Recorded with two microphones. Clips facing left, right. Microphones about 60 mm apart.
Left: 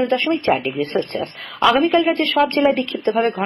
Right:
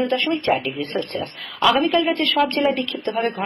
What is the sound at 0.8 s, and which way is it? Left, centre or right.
Speech, left.